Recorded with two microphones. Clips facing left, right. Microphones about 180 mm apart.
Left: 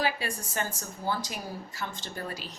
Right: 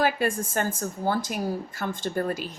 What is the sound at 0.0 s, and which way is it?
Speech, 50° right (ahead or behind).